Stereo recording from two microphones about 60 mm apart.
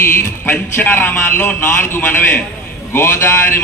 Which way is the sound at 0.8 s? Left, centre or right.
Left.